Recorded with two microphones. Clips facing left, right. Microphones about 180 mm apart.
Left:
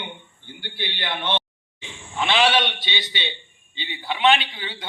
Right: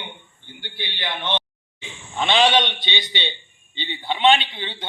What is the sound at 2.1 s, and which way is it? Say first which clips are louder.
Speech: right 2 dB; 20° right (ahead or behind).